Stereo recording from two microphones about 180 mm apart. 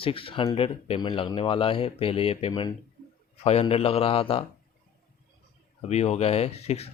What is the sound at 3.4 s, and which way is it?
Speech, 35° left (ahead or behind).